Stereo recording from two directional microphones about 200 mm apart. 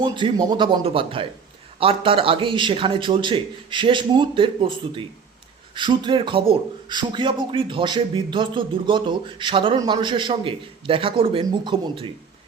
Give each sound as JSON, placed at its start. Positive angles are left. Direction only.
{"t": 0.0, "sound": "a man's voice", "side_deg": -25}